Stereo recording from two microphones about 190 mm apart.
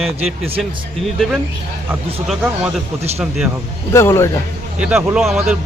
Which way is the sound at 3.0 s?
35° right (ahead or behind).